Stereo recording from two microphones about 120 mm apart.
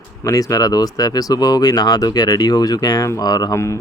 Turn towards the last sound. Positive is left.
turn(degrees=25)  # may be behind; listen again after turning